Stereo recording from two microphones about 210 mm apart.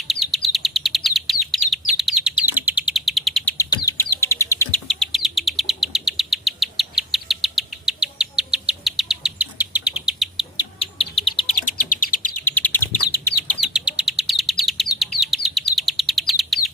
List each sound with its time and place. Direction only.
0.0 s chirp: centre (ahead or behind)
2.5 s bird: 10° right (ahead or behind)
3.6 s bird: 15° left (ahead or behind)
4.9 s insect: centre (ahead or behind)
10.6 s bird: 25° left (ahead or behind)
11.5 s bird: 40° left (ahead or behind)
12.5 s chirp: 10° left (ahead or behind)
13.6 s bird: 5° right (ahead or behind)
15.4 s chirp: centre (ahead or behind)